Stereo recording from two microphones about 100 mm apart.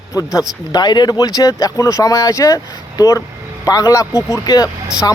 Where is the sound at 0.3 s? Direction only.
45° left (ahead or behind).